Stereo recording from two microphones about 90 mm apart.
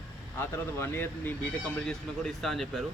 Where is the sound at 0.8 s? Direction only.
25° left (ahead or behind).